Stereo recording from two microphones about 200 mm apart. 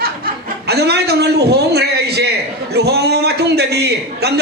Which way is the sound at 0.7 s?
55° right (ahead or behind).